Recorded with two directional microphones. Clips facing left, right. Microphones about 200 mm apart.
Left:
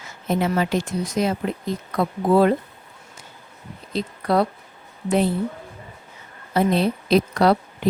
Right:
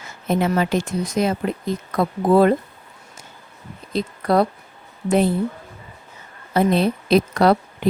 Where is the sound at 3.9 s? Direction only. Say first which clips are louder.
Right 2 dB; 45° right (ahead or behind).